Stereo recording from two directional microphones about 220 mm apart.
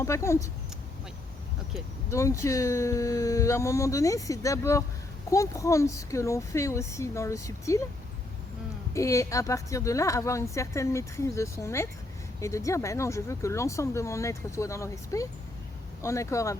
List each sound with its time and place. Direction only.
0.0 s speech: 15° left (ahead or behind)
2.0 s speech: 15° left (ahead or behind)
8.9 s speech: 15° left (ahead or behind)